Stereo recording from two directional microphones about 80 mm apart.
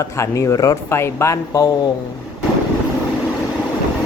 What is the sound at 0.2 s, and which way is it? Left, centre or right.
Speech, left.